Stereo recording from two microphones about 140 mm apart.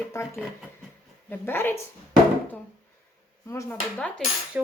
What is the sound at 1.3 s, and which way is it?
Speech, 15° left (ahead or behind).